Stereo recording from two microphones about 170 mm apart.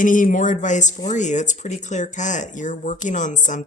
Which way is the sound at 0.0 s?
50° left (ahead or behind).